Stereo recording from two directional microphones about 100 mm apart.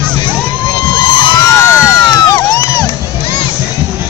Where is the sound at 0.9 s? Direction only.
50° left (ahead or behind).